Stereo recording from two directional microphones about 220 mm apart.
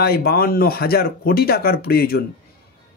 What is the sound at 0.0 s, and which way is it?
Speech, 45° left (ahead or behind).